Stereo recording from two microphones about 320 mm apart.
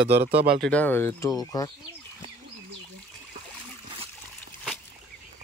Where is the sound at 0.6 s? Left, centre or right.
Centre.